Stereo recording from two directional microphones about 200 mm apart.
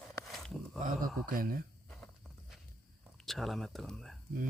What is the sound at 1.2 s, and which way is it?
Speech, 45° right (ahead or behind).